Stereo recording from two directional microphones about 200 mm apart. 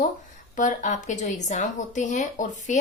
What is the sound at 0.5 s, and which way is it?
A woman's voice, 40° left (ahead or behind).